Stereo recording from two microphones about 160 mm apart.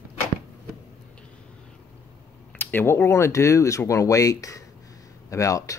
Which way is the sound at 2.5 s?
10° left (ahead or behind).